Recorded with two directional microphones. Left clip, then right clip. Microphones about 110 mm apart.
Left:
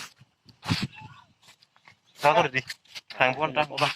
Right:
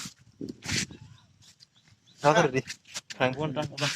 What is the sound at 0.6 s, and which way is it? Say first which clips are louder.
Speech: left 1 dB; 20° right (ahead or behind).